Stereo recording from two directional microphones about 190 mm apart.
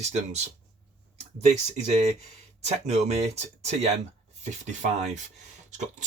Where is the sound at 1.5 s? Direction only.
35° right (ahead or behind).